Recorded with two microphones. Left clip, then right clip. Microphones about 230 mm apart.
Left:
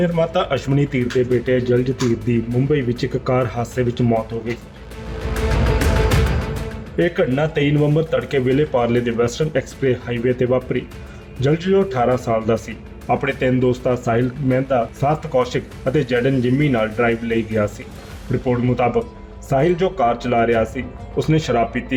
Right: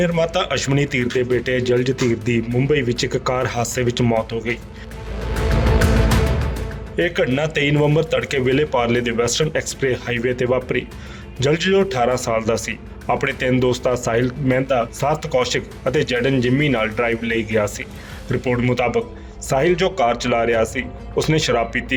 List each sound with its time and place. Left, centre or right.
0.0 s a man's voice: right
6.9 s a man's voice: right